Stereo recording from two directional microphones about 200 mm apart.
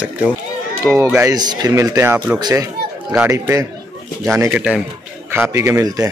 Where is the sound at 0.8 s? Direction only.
10° right (ahead or behind).